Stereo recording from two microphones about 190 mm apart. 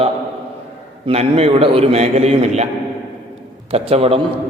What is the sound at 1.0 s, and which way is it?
A man's voice, 35° right (ahead or behind).